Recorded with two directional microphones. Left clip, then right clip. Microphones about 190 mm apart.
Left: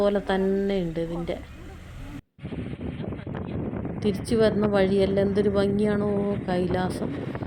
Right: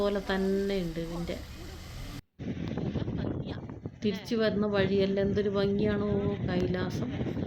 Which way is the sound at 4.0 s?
35° left (ahead or behind).